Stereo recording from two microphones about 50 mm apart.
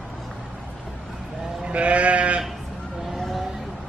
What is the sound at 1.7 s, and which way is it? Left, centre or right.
Sheep, right.